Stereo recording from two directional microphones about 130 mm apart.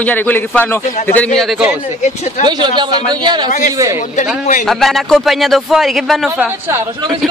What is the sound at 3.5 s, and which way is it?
Speech, 75° left (ahead or behind).